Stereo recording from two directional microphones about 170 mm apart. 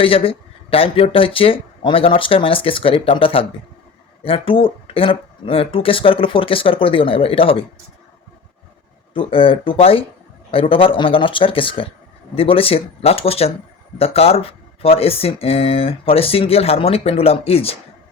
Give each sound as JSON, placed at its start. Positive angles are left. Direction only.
{"t": 0.0, "sound": "speech", "side_deg": 35}
{"t": 9.1, "sound": "speech", "side_deg": 30}